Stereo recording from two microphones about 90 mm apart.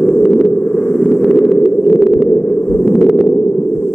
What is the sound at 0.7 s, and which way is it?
Vehicle, 15° left (ahead or behind).